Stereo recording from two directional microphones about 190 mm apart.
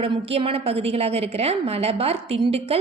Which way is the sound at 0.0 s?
30° right (ahead or behind).